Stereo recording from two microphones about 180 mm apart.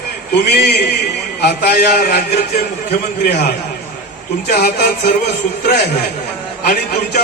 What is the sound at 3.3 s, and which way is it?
Speech, 60° left (ahead or behind).